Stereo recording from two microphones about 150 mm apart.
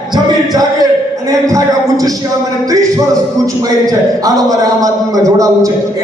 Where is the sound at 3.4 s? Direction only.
25° right (ahead or behind).